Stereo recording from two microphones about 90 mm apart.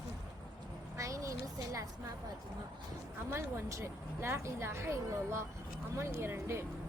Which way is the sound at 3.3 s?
30° right (ahead or behind).